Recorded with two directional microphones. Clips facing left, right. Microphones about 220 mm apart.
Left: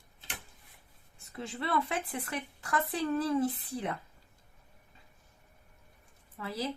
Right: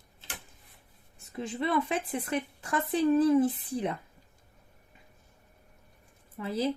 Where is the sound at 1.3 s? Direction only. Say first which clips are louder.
Right 4 dB; 15° right (ahead or behind).